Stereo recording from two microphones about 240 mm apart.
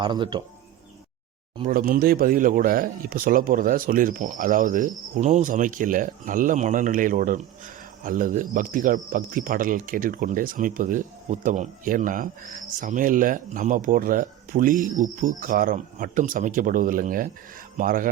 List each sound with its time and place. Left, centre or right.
0.0 s speech: centre
1.5 s speech: right